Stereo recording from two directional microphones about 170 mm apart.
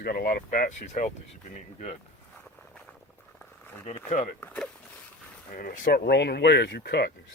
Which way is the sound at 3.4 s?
15° left (ahead or behind).